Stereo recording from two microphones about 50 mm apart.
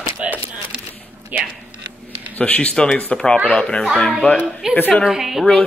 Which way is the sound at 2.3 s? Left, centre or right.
Left.